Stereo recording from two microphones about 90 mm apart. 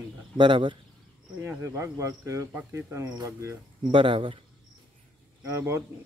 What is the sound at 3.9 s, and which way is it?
Speech, 75° right (ahead or behind).